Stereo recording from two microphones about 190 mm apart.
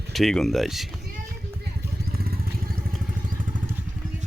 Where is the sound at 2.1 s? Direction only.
50° right (ahead or behind).